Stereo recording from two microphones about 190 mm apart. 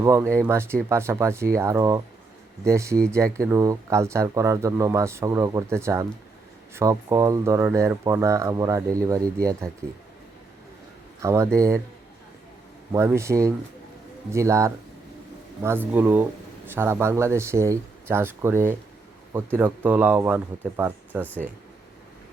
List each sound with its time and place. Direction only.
0.0 s speech: 15° right (ahead or behind)
11.2 s speech: 15° right (ahead or behind)
12.9 s speech: 15° right (ahead or behind)
21.2 s speech: 10° left (ahead or behind)